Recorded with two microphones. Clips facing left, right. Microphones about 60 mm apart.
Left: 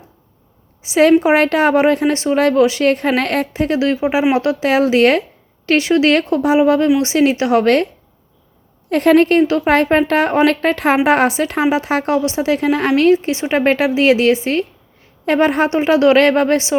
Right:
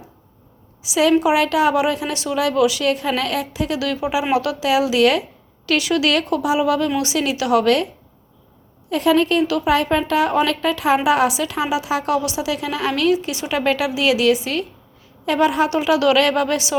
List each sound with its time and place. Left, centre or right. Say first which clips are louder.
0.8 s a woman's voice: left 5 dB; left
8.9 s speech: left 5 dB; left